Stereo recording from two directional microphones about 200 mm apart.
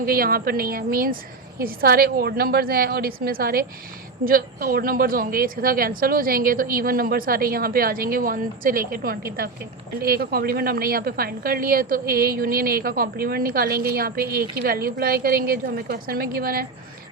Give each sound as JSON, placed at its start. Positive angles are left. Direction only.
{"t": 0.0, "sound": "speech", "side_deg": -50}